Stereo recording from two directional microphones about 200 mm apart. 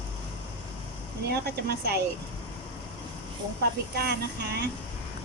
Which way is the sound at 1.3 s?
55° right (ahead or behind).